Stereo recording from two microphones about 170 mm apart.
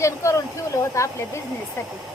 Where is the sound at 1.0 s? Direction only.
20° left (ahead or behind).